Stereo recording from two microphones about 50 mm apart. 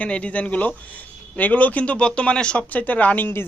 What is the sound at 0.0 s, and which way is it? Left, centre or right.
Speech, left.